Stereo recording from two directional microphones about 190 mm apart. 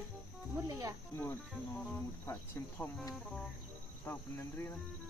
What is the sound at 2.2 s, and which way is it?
Speech, 15° left (ahead or behind).